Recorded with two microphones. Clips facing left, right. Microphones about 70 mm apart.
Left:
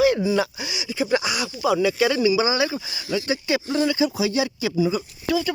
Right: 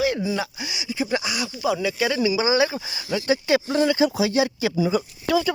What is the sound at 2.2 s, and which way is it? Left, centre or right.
Speech, right.